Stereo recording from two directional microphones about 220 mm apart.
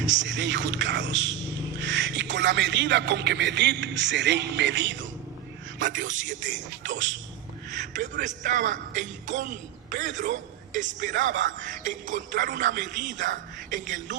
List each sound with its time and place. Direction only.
0.0 s a man's voice: 55° right (ahead or behind)
6.1 s a man's voice: 35° right (ahead or behind)
6.4 s a man's voice: 55° right (ahead or behind)
7.8 s a man's voice: 35° right (ahead or behind)